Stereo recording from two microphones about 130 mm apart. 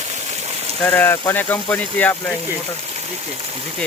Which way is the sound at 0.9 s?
15° left (ahead or behind).